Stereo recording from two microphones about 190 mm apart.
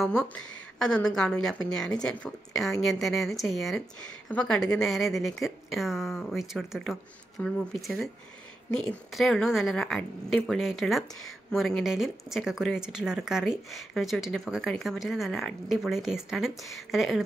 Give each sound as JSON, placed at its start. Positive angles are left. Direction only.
{"t": 0.0, "sound": "speech", "side_deg": 5}